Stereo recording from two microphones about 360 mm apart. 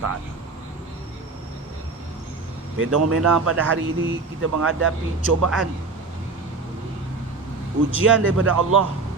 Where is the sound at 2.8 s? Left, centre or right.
Right.